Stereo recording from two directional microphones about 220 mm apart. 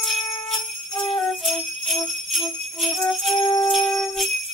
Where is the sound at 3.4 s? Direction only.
15° left (ahead or behind).